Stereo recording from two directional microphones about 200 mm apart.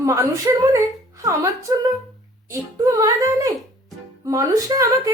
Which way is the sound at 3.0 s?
15° right (ahead or behind).